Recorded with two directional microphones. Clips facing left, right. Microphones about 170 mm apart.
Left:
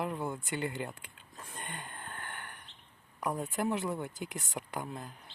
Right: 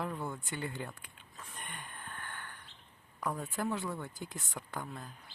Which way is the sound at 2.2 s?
20° left (ahead or behind).